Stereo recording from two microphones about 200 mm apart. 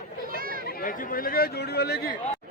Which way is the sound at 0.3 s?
45° right (ahead or behind).